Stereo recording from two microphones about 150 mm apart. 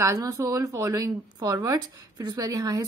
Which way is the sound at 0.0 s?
20° right (ahead or behind).